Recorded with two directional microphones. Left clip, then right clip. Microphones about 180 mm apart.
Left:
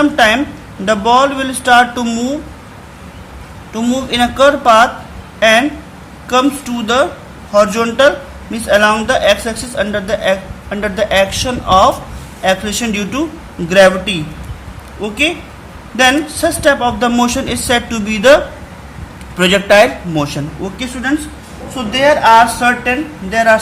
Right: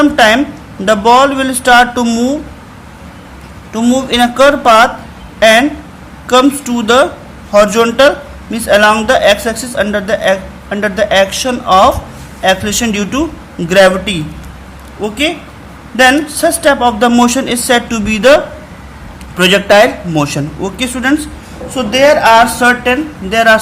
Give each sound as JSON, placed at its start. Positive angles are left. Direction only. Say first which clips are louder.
{"t": 0.0, "sound": "a man's voice", "louder": "right 3 dB", "side_deg": -20}
{"t": 3.7, "sound": "a man's voice", "louder": "right 4 dB", "side_deg": -20}
{"t": 16.0, "sound": "a man's voice", "louder": "right 3 dB", "side_deg": -15}